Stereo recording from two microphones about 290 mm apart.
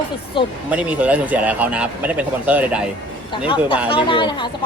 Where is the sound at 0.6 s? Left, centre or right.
Centre.